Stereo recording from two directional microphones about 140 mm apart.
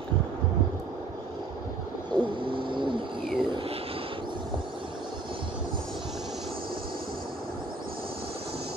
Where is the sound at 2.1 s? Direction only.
35° right (ahead or behind).